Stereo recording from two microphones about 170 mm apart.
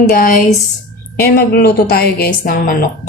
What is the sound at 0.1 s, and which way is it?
A woman's voice, 60° left (ahead or behind).